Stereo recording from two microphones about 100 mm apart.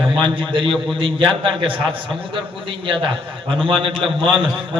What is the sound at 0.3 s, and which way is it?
A man's voice, 60° right (ahead or behind).